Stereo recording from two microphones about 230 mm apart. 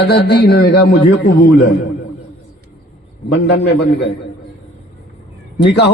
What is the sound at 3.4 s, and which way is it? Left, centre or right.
Speech, left.